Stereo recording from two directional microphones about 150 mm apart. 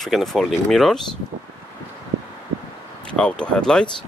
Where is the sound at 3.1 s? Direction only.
5° left (ahead or behind).